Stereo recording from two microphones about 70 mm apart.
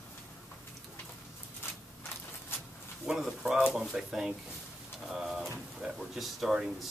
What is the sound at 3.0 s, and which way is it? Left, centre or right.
Speech, centre.